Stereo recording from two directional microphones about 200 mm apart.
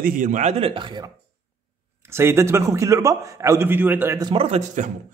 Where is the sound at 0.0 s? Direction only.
40° right (ahead or behind); by 4.3 s 10° right (ahead or behind).